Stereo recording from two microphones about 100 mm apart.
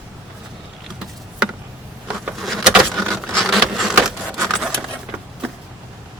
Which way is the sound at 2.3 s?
Centre (ahead or behind).